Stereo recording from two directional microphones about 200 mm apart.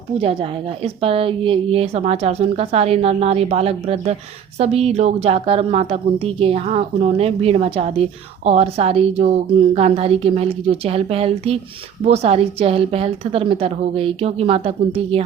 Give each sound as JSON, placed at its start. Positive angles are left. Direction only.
{"t": 0.8, "sound": "a woman's voice", "side_deg": -30}